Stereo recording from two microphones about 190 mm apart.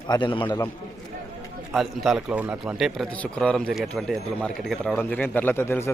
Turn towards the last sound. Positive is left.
turn(degrees=10)  # may be behind; listen again after turning